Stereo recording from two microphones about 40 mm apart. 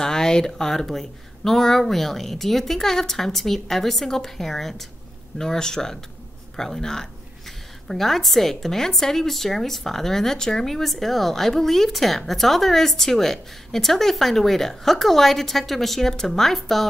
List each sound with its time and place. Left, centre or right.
0.0 s speech: centre